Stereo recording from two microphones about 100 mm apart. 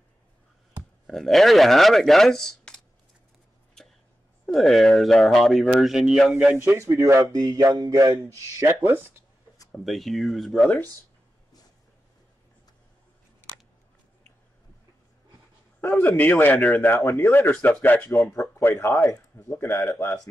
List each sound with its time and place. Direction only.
1.0 s speech: 5° left (ahead or behind)
4.5 s speech: centre (ahead or behind)
6.9 s speech: 30° right (ahead or behind)
9.7 s speech: centre (ahead or behind)
15.9 s speech: 20° left (ahead or behind)